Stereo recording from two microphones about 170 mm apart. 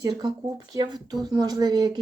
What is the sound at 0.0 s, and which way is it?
Speech, 25° right (ahead or behind).